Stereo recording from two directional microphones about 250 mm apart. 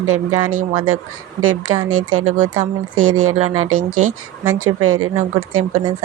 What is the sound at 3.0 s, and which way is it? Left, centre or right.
Speech, right.